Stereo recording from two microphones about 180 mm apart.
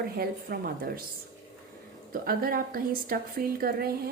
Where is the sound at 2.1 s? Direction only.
55° right (ahead or behind).